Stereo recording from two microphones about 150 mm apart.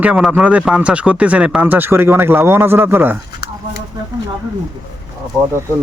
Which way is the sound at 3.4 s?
90° left.